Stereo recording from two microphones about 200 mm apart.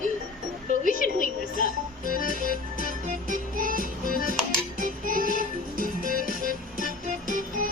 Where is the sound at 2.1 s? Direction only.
45° right (ahead or behind).